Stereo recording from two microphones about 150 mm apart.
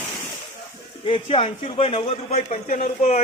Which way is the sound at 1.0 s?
35° left (ahead or behind).